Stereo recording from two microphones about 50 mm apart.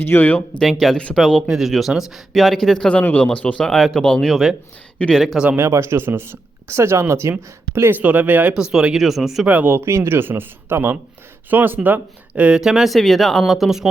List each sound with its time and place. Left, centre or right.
0.0 s speech: left
0.6 s speech: centre
2.3 s speech: centre
3.0 s speech: left
3.6 s speech: centre
4.0 s speech: centre
4.3 s speech: centre
5.5 s speech: right
8.0 s speech: right
8.5 s speech: centre
9.0 s speech: centre
9.6 s speech: right
12.5 s speech: centre